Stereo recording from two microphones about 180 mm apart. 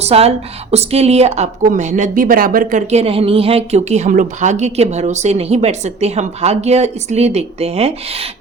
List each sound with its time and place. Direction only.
0.0 s a woman's voice: 35° right (ahead or behind)